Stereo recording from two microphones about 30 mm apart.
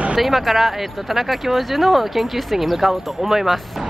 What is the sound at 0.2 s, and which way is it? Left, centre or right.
Speech, centre.